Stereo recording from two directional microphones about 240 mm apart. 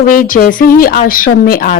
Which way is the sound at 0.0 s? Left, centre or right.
Left.